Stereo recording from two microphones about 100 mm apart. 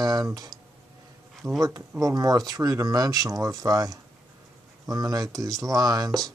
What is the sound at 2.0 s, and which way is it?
Speech, 35° right (ahead or behind).